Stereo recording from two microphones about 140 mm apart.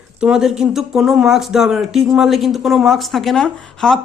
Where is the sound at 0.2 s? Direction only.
5° right (ahead or behind).